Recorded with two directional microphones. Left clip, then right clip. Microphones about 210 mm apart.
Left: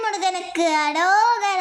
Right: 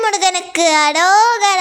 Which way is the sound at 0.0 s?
45° right (ahead or behind).